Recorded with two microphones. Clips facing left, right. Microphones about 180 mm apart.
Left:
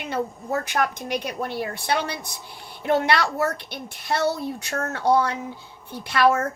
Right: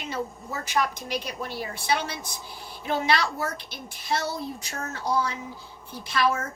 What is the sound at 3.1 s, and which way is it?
A woman's voice, 65° left (ahead or behind).